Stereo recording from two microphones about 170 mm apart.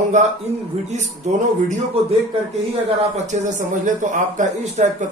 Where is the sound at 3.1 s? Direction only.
45° right (ahead or behind).